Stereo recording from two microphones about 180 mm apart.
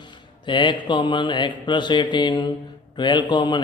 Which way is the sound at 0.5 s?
25° left (ahead or behind).